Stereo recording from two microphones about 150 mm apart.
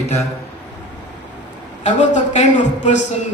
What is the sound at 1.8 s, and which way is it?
Speech, 50° left (ahead or behind).